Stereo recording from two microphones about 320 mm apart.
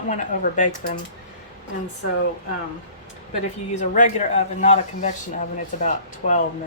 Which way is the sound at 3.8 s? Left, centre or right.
Left.